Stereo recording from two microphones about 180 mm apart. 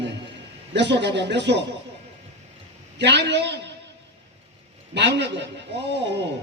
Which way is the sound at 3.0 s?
70° right (ahead or behind).